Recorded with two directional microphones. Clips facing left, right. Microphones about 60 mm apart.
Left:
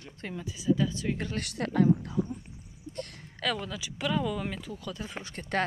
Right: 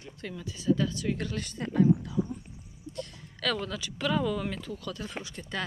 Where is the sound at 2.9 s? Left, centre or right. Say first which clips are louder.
Even; left.